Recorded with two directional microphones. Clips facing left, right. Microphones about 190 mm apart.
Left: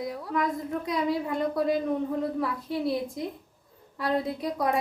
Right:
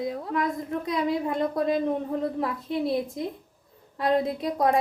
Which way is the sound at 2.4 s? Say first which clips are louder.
Right 1 dB; 20° right (ahead or behind).